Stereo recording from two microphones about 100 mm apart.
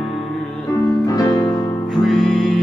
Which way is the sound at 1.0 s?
40° left (ahead or behind).